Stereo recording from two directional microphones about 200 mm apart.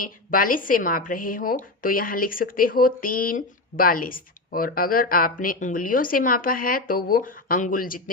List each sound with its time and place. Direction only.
0.0 s a woman's voice: 45° left (ahead or behind)